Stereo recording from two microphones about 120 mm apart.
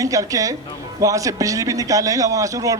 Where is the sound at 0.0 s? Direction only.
30° right (ahead or behind).